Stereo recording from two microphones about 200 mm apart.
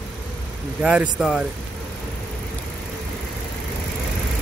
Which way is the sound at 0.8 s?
5° right (ahead or behind).